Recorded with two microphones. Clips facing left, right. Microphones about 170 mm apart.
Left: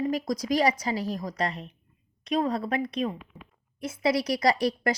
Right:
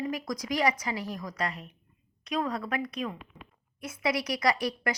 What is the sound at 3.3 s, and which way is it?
Speech, 5° left (ahead or behind).